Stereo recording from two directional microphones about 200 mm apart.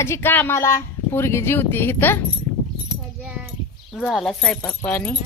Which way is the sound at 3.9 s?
Centre (ahead or behind).